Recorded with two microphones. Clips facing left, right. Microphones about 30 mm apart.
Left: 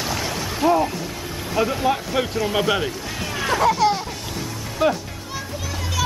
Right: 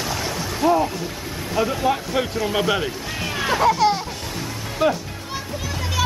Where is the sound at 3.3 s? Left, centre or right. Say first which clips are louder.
Right 1 dB; centre.